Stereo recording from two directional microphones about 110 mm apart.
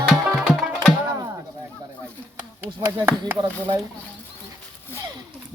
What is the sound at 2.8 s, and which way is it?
Speech, 20° right (ahead or behind).